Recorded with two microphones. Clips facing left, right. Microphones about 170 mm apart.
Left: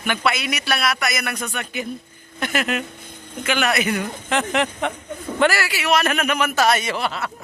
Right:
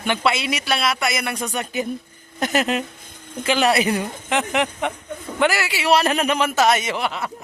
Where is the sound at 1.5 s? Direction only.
40° right (ahead or behind).